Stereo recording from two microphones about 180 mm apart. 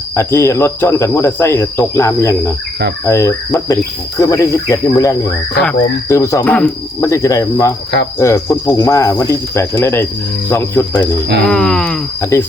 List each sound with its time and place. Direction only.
0.1 s speech: 15° left (ahead or behind)
12.2 s speech: 15° left (ahead or behind)